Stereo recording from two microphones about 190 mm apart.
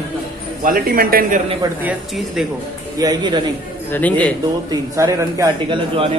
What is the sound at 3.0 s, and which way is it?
Speech, 20° right (ahead or behind).